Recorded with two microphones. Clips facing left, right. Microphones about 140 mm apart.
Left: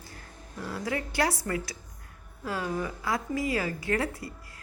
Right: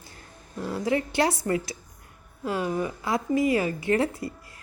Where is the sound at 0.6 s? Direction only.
25° right (ahead or behind).